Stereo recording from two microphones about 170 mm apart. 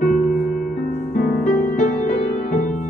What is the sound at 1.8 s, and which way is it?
Music, 45° left (ahead or behind).